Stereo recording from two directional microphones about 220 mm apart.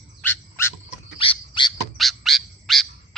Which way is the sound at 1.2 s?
25° left (ahead or behind).